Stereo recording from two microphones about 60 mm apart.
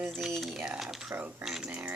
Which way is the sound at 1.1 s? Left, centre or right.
Right.